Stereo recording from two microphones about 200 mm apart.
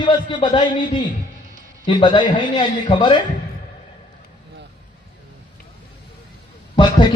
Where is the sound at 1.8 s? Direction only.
25° left (ahead or behind).